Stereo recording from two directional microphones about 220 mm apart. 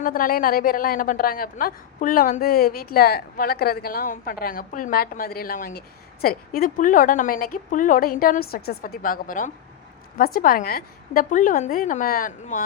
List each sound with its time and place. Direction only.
0.0 s a woman's voice: 40° left (ahead or behind)